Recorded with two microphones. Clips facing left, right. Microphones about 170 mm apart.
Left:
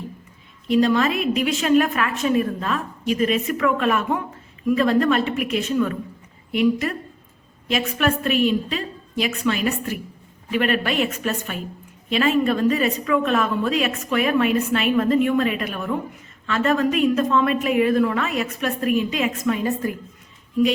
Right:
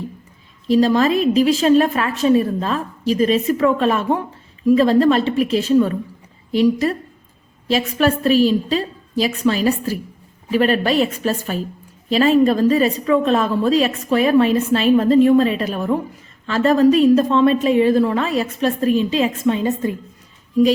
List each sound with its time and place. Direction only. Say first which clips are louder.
0.7 s a woman's voice: right 4 dB; 35° right (ahead or behind)